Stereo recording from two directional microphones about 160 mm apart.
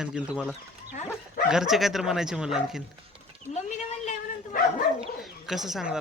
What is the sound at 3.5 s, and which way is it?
Bow-wow, 50° left (ahead or behind).